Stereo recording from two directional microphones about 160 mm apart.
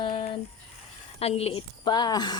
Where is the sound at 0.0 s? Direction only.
35° left (ahead or behind).